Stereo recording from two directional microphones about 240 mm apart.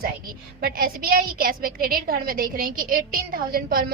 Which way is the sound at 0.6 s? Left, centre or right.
Right.